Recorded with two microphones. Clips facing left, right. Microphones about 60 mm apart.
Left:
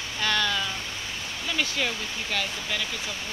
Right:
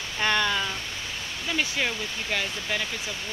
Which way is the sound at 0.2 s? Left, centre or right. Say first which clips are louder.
Right 2 dB; right.